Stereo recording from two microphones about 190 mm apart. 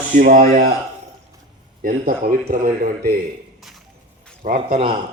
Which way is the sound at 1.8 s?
45° right (ahead or behind).